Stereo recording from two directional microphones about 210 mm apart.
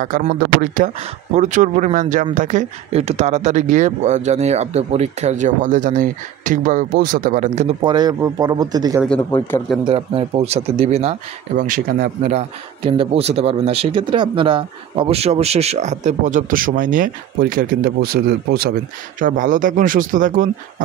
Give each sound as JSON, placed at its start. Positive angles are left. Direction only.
{"t": 0.0, "sound": "speech", "side_deg": -40}
{"t": 7.8, "sound": "speech", "side_deg": -20}
{"t": 9.0, "sound": "speech", "side_deg": 5}
{"t": 9.8, "sound": "speech", "side_deg": -25}